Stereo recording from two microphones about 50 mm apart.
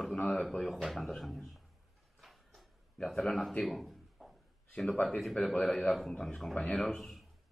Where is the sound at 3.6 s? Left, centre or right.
Centre.